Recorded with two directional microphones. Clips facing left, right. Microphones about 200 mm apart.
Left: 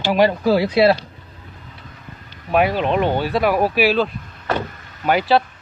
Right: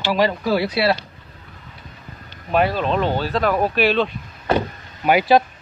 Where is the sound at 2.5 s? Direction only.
15° left (ahead or behind).